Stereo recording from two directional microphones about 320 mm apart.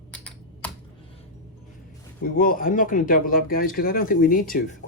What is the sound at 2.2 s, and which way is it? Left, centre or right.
Speech, left.